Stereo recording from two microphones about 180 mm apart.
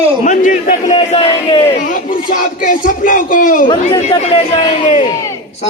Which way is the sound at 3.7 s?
30° left (ahead or behind).